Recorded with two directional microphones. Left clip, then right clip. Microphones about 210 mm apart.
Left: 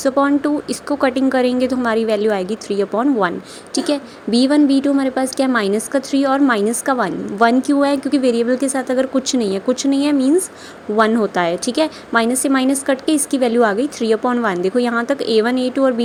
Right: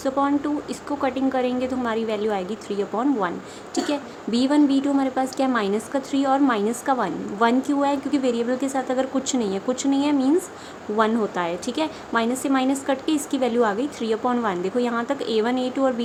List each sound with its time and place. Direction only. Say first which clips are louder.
0.0 s a woman's voice: left 7 dB; 25° left (ahead or behind)